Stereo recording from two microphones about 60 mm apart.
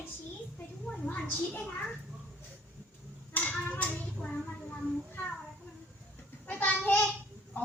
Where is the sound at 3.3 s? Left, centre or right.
Left.